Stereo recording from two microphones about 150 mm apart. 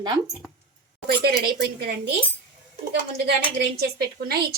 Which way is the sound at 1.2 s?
90° right.